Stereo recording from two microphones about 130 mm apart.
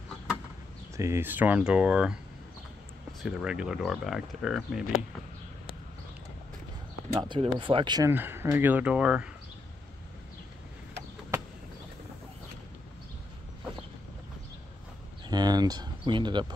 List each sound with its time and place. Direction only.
0.9 s speech: 20° right (ahead or behind); by 4.8 s 5° right (ahead or behind)
7.2 s speech: 40° right (ahead or behind)
8.1 s speech: 15° right (ahead or behind)
15.2 s speech: 30° right (ahead or behind)